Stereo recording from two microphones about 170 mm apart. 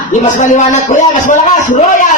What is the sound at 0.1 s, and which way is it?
A child's voice, 45° left (ahead or behind).